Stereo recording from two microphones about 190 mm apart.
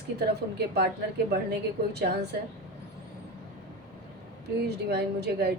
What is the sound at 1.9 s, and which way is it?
Speech, 60° right (ahead or behind).